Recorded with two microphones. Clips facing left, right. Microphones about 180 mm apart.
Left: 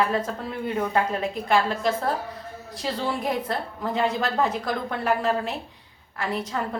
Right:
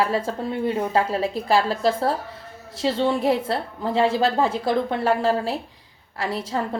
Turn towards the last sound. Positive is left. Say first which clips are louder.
# right 2 dB
turn(degrees=-30)  # may be behind; listen again after turning